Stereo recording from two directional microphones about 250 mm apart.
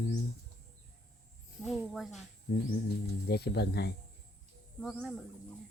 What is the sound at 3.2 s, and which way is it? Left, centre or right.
Speech, left.